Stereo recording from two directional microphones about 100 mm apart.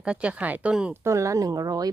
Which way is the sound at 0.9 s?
30° right (ahead or behind).